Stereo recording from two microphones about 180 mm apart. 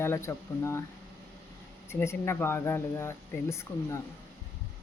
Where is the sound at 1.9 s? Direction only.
15° left (ahead or behind).